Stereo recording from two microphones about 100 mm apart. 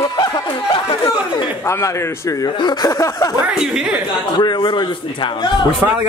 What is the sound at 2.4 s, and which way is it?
Speech, 45° left (ahead or behind).